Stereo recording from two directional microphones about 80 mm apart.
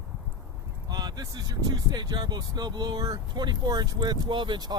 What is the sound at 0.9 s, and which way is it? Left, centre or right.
Speech, right.